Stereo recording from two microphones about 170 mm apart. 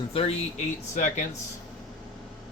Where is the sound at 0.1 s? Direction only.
35° left (ahead or behind).